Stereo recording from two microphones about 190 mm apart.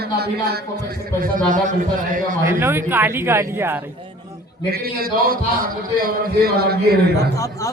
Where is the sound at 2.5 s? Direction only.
10° right (ahead or behind).